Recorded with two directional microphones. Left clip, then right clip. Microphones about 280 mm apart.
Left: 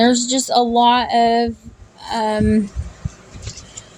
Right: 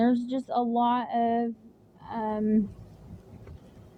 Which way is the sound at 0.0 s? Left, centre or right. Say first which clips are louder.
Left 11 dB; right.